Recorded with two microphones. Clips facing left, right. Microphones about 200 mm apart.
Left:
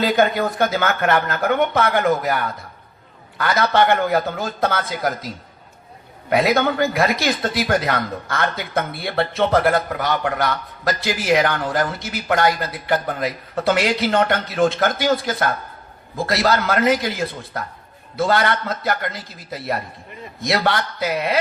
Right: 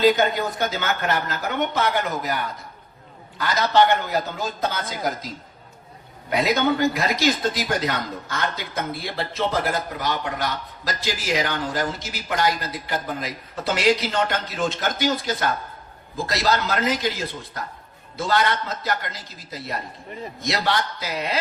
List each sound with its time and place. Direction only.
0.0 s speech: 55° left (ahead or behind)
6.3 s speech: 60° left (ahead or behind)
18.2 s speech: 60° left (ahead or behind)
20.5 s speech: 60° left (ahead or behind)